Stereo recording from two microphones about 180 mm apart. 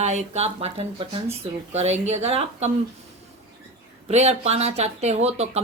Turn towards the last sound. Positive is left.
turn(degrees=-35)  # may be behind; listen again after turning